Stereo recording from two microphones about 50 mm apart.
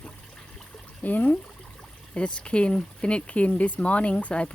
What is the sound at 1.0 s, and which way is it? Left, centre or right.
Speech, left.